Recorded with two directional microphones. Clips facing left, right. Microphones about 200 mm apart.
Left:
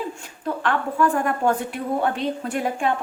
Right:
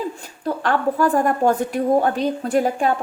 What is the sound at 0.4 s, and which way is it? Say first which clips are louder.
A woman's voice: right 4 dB; 40° right (ahead or behind).